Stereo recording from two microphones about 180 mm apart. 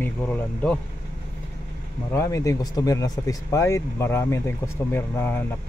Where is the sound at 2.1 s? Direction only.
15° left (ahead or behind).